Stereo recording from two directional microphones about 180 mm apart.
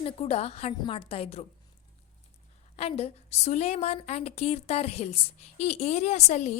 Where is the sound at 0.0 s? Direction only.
35° left (ahead or behind).